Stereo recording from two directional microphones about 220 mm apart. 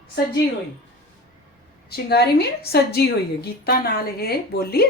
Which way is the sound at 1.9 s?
45° left (ahead or behind).